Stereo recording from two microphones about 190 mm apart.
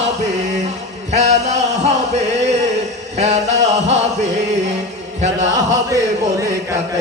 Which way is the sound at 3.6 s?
35° right (ahead or behind).